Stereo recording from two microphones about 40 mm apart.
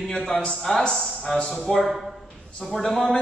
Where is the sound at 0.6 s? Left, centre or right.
Centre.